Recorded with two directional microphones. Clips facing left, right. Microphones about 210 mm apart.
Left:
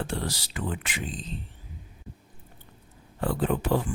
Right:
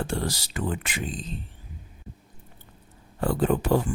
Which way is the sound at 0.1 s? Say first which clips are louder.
Right 3 dB; 45° right (ahead or behind).